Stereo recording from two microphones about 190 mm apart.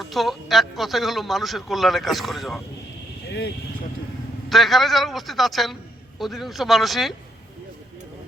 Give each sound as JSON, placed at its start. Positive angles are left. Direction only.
{"t": 0.0, "sound": "speech", "side_deg": 0}
{"t": 4.4, "sound": "speech", "side_deg": 0}